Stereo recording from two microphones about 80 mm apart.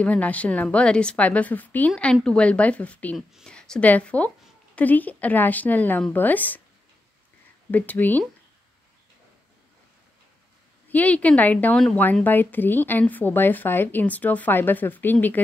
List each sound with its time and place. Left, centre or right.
0.0 s a woman's voice: centre
7.7 s speech: left
10.9 s speech: centre